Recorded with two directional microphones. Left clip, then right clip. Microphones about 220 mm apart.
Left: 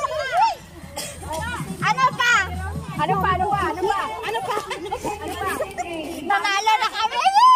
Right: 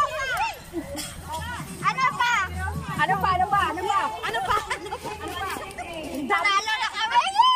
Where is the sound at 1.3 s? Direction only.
45° left (ahead or behind).